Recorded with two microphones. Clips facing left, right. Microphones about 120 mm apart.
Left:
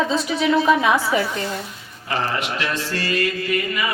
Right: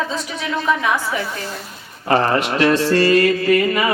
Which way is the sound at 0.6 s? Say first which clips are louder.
Left 2 dB; 25° left (ahead or behind).